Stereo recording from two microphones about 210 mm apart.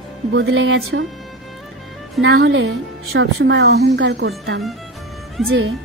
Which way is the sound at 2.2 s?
55° right (ahead or behind).